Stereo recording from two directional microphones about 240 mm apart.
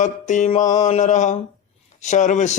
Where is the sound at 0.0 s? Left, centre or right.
Left.